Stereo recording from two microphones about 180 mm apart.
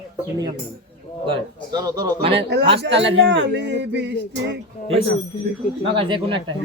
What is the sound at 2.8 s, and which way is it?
Speech, 80° right.